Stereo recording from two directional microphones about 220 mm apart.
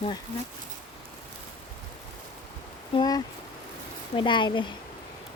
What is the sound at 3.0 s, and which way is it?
Speech, 15° left (ahead or behind).